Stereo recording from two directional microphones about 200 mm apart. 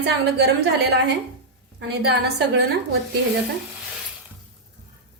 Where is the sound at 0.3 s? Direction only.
55° right (ahead or behind).